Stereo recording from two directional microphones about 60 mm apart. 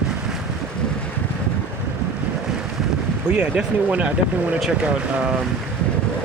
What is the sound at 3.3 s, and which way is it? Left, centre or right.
Speech, right.